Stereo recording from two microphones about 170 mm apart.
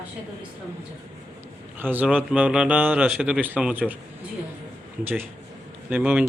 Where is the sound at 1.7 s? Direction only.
10° right (ahead or behind).